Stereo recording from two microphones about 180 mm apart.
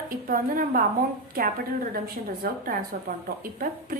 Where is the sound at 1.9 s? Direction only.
55° right (ahead or behind).